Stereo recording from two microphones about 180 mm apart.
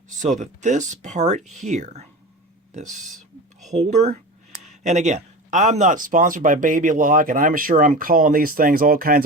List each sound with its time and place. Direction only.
0.1 s speech: 40° right (ahead or behind)